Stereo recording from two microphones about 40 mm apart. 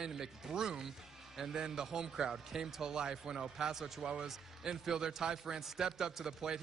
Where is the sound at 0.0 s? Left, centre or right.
Centre.